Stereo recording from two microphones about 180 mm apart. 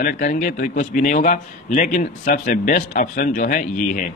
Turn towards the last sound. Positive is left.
turn(degrees=50)  # may be behind; listen again after turning